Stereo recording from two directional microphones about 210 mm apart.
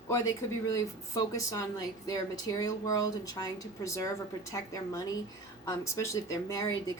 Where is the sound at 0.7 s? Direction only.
15° left (ahead or behind).